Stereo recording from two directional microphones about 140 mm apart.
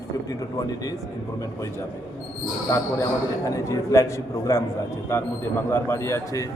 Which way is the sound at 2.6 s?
20° left (ahead or behind).